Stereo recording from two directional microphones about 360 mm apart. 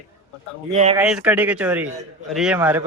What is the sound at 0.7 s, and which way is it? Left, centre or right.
Speech, centre.